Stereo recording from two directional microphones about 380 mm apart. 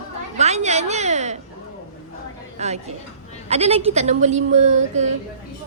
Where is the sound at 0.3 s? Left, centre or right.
Centre.